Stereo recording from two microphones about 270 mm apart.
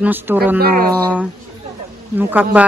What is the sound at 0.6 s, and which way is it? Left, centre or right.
Speech, right.